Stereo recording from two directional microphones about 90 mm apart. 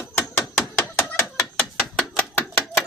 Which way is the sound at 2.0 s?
20° left (ahead or behind).